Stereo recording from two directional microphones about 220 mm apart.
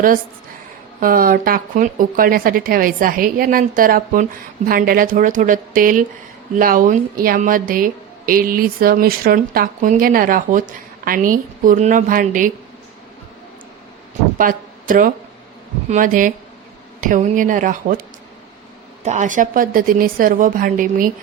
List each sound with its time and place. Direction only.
0.9 s a woman's voice: 40° right (ahead or behind)
14.3 s a woman's voice: 40° right (ahead or behind)
19.0 s a woman's voice: 35° right (ahead or behind)